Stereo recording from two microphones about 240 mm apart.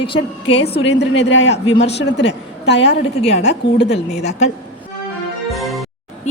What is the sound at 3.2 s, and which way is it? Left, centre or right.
A woman's voice, left.